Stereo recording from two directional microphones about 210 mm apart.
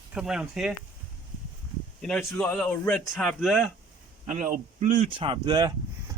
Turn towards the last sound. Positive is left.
turn(degrees=-20)  # may be behind; listen again after turning